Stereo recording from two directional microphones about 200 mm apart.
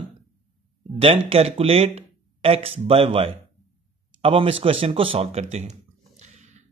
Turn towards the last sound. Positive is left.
turn(degrees=-35)  # may be behind; listen again after turning